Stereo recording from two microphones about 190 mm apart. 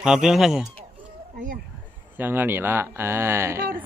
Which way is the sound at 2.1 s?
10° right (ahead or behind).